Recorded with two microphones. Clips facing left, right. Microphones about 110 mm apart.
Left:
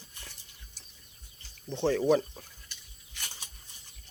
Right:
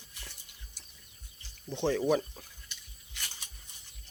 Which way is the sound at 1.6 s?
15° right (ahead or behind).